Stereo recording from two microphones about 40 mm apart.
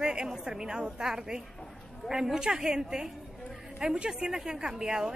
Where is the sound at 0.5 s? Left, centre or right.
Centre.